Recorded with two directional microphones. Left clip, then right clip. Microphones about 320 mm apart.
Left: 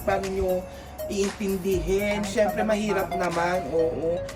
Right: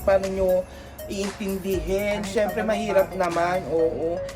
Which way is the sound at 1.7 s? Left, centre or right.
Centre.